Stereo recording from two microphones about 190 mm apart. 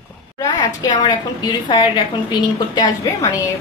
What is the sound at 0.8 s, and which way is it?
A woman's voice, 20° left (ahead or behind).